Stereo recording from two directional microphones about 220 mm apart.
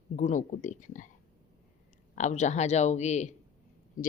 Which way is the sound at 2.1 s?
35° left (ahead or behind).